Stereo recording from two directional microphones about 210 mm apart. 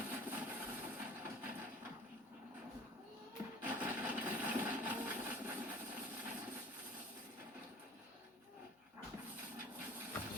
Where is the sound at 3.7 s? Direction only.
10° right (ahead or behind).